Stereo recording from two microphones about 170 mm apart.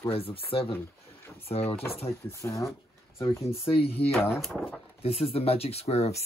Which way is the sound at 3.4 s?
35° left (ahead or behind).